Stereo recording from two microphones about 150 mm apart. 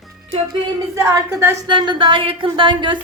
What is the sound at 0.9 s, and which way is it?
Speech, 20° right (ahead or behind).